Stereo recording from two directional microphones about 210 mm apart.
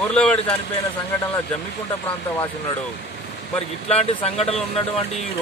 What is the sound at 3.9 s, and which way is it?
Speech, 30° left (ahead or behind).